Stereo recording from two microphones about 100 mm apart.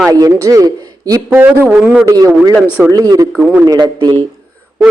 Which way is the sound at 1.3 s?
20° right (ahead or behind).